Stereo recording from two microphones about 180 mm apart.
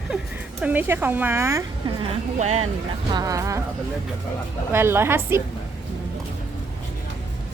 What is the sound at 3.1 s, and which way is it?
Speech, 20° right (ahead or behind).